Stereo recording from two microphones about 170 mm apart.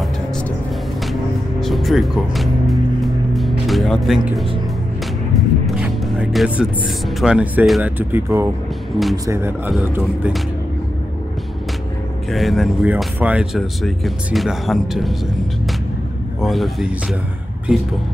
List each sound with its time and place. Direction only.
1.6 s music: centre (ahead or behind)
7.2 s speech: 5° right (ahead or behind)
8.1 s speech: 15° right (ahead or behind)
12.3 s speech: centre (ahead or behind)
16.3 s speech: centre (ahead or behind)